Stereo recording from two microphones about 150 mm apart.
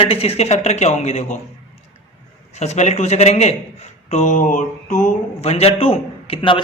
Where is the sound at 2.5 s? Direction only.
45° left (ahead or behind).